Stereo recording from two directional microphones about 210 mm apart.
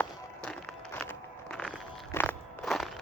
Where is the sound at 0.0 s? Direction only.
10° left (ahead or behind).